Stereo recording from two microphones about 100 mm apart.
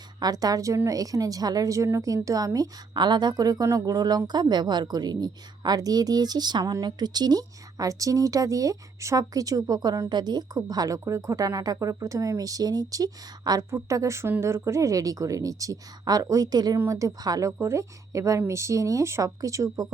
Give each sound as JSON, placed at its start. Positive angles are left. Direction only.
{"t": 0.2, "sound": "a woman's voice", "side_deg": -40}
{"t": 16.7, "sound": "speech", "side_deg": -30}